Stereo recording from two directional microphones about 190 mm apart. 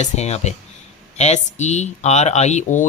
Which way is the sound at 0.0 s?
35° left (ahead or behind).